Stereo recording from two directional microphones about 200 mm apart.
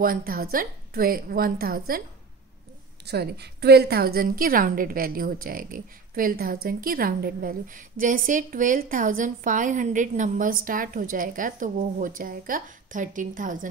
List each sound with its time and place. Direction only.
0.0 s a woman's voice: 45° right (ahead or behind)
3.1 s a woman's voice: 55° right (ahead or behind)